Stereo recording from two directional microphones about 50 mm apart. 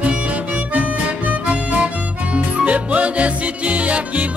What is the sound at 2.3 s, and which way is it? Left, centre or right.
Music, right.